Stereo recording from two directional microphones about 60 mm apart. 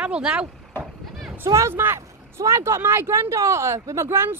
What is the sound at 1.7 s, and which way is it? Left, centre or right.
Speech, right.